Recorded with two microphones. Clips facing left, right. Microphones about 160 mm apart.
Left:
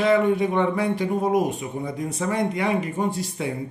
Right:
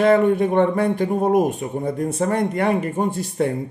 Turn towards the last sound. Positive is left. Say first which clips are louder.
# right 5 dB
turn(degrees=-55)  # may be behind; listen again after turning